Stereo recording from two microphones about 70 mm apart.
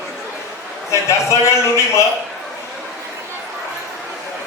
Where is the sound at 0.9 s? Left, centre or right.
Left.